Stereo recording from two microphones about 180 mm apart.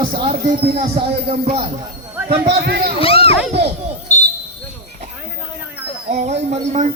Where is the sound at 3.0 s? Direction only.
30° left (ahead or behind).